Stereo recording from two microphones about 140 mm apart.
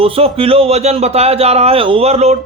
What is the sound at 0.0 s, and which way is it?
A man's voice, 40° right (ahead or behind).